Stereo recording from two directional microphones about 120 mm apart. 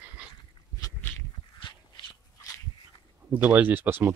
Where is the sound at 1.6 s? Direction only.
40° left (ahead or behind).